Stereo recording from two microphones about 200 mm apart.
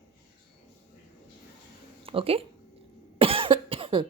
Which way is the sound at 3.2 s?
25° right (ahead or behind).